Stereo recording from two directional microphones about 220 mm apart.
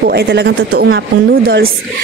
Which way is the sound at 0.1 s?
50° right (ahead or behind).